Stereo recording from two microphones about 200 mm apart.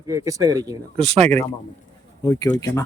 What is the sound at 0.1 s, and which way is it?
Speech, 15° right (ahead or behind).